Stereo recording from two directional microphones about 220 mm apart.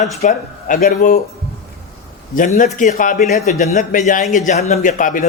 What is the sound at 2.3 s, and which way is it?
A man's voice, 35° left (ahead or behind).